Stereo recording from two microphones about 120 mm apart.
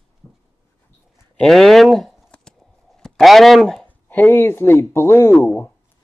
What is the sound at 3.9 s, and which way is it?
Speech, 15° left (ahead or behind).